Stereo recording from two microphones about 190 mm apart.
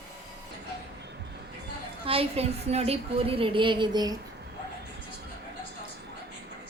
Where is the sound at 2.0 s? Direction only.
30° right (ahead or behind).